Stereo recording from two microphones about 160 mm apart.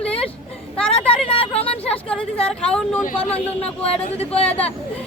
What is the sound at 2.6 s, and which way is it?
Speech, 10° left (ahead or behind).